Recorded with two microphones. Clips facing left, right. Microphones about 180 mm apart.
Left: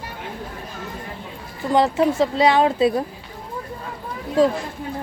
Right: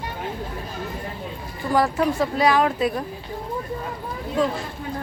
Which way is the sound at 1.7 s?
20° left (ahead or behind).